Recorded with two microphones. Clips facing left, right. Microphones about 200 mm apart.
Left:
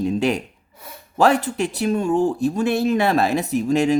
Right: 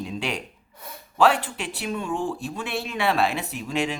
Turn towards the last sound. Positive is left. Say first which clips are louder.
# left 10 dB
turn(degrees=40)  # may be behind; listen again after turning